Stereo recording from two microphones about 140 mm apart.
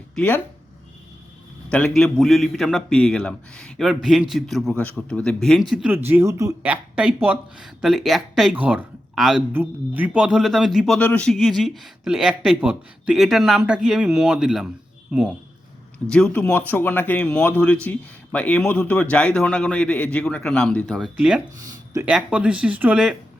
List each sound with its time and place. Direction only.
0.2 s speech: 15° left (ahead or behind)
1.7 s a man's voice: 5° left (ahead or behind)
5.9 s speech: 15° right (ahead or behind)
6.6 s a man's voice: 10° right (ahead or behind)
8.5 s a man's voice: 10° right (ahead or behind)
16.0 s speech: 5° left (ahead or behind)
21.2 s speech: 5° right (ahead or behind)